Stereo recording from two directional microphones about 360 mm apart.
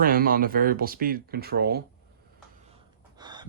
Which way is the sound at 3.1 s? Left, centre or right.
Centre.